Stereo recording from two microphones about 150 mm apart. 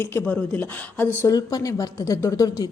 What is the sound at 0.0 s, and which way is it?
Speech, 15° left (ahead or behind).